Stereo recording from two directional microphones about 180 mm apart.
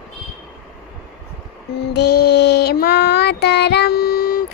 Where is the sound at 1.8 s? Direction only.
65° left (ahead or behind).